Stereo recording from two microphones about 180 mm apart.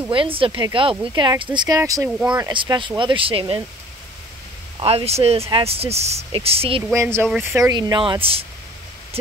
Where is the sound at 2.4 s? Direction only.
25° right (ahead or behind).